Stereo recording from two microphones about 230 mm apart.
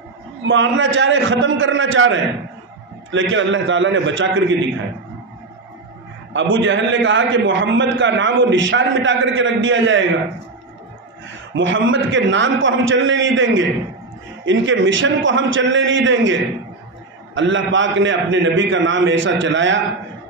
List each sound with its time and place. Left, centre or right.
0.4 s a man's voice: right
6.3 s a man's voice: right
11.5 s a man's voice: right